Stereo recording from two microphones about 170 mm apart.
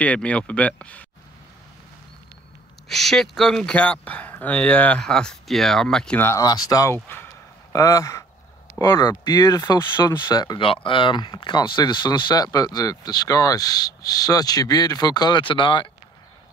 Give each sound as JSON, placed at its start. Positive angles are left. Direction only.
{"t": 0.0, "sound": "speech", "side_deg": 10}
{"t": 2.9, "sound": "speech", "side_deg": 0}